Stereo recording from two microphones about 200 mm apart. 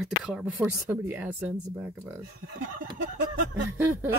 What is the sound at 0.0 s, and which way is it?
Speech, centre (ahead or behind).